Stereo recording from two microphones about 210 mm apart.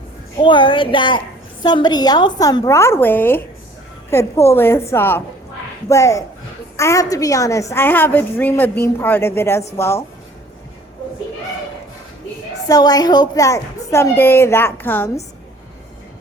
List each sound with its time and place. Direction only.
0.4 s a woman's voice: 25° left (ahead or behind)
12.6 s a woman's voice: 20° left (ahead or behind)